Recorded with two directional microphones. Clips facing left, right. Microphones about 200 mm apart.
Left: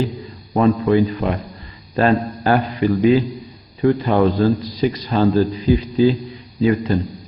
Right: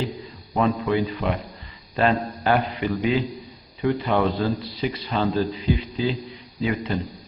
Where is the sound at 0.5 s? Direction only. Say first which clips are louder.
Left 7 dB; 45° left (ahead or behind).